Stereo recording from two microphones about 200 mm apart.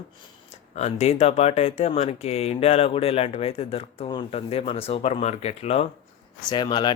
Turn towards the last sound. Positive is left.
turn(degrees=20)  # may be behind; listen again after turning